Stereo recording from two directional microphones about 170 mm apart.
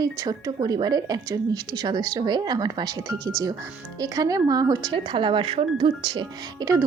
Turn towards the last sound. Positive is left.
turn(degrees=-20)  # may be behind; listen again after turning